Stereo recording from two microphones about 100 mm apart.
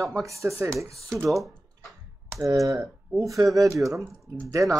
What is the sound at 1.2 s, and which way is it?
Speech, centre (ahead or behind).